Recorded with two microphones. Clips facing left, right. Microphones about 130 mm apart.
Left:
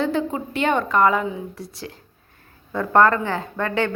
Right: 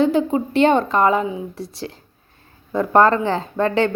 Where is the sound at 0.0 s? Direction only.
20° right (ahead or behind).